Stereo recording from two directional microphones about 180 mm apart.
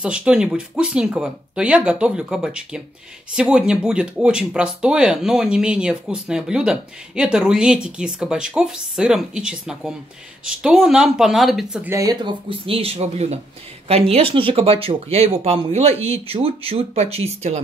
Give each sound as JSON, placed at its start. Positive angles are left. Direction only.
{"t": 0.0, "sound": "speech", "side_deg": -5}
{"t": 11.9, "sound": "speech", "side_deg": -20}